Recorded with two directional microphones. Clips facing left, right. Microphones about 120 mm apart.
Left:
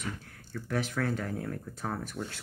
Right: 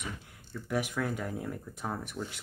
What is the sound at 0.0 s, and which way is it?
Speech, 15° right (ahead or behind).